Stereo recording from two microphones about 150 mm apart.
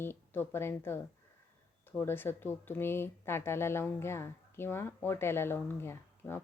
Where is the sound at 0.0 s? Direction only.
15° left (ahead or behind).